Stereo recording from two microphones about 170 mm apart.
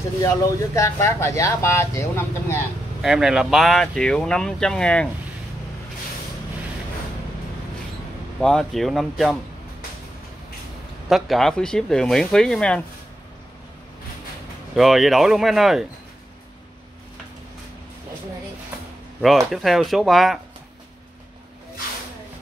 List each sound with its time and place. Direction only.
0.2 s speech: 20° left (ahead or behind)
3.0 s speech: 5° right (ahead or behind)
8.4 s speech: 5° left (ahead or behind)
11.1 s speech: centre (ahead or behind)
14.8 s speech: centre (ahead or behind)
19.2 s speech: centre (ahead or behind)